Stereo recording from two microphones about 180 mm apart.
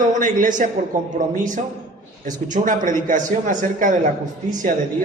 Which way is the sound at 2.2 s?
45° right (ahead or behind).